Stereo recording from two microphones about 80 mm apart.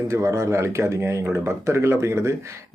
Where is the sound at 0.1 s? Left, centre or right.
Right.